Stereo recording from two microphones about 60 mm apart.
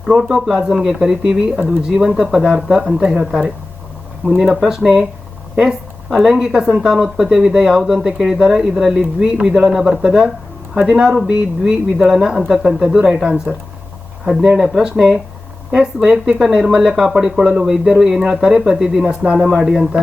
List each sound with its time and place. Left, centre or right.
0.0 s speech: centre
19.5 s speech: centre